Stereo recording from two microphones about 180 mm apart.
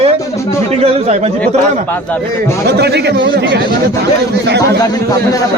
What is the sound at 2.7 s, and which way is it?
A man's voice, 65° right (ahead or behind).